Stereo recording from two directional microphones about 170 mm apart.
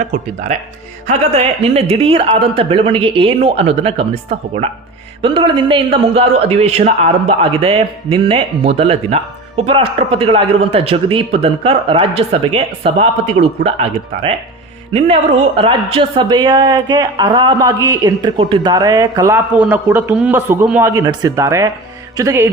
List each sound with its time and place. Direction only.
0.1 s a man's voice: 45° right (ahead or behind); by 21.7 s 20° right (ahead or behind)
22.2 s music: 15° right (ahead or behind)